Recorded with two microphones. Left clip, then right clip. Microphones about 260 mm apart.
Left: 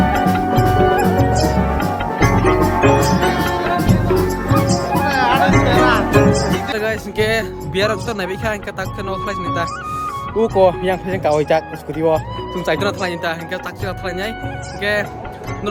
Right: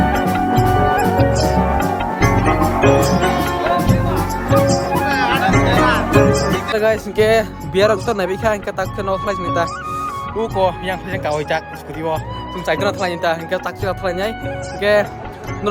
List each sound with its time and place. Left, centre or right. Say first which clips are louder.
0.1 s music: even; centre
5.0 s music: left 3 dB; left
6.1 s music: right 1 dB; centre
6.7 s speech: right 4 dB; centre
10.6 s speech: left 4 dB; left
12.6 s speech: right 1 dB; centre
13.3 s speech: right 4 dB; centre